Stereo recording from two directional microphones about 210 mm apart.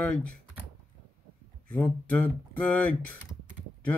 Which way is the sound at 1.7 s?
10° left (ahead or behind).